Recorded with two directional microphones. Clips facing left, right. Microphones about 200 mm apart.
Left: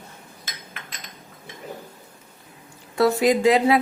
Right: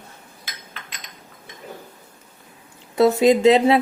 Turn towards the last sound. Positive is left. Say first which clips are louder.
# right 3 dB
turn(degrees=-25)  # may be behind; listen again after turning